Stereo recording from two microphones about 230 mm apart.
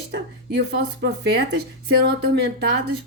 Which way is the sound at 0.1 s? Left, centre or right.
Right.